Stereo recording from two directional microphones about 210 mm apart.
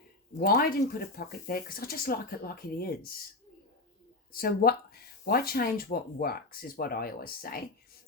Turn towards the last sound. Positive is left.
turn(degrees=45)  # may be behind; listen again after turning